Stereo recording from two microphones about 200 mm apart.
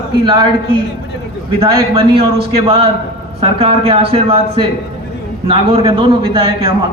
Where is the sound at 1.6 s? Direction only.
25° right (ahead or behind).